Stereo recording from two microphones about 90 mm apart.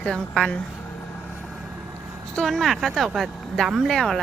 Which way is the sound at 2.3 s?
Centre (ahead or behind).